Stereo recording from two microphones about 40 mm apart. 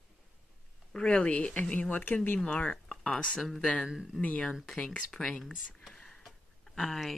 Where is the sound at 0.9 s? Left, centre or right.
Left.